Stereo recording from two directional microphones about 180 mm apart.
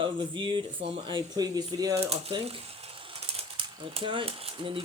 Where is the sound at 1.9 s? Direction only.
35° right (ahead or behind).